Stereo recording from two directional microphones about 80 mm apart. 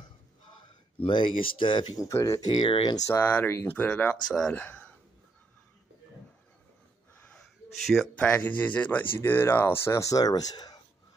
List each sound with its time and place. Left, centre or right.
1.0 s speech: left
2.0 s speech: left
2.4 s speech: left
3.0 s speech: left
3.3 s speech: left
7.3 s a sound: centre
8.2 s speech: centre; by 10.8 s left